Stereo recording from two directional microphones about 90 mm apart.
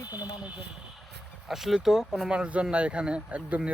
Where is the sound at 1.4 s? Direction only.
5° right (ahead or behind).